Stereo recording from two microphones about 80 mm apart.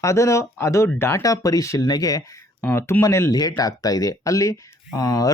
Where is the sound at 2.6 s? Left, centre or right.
Left.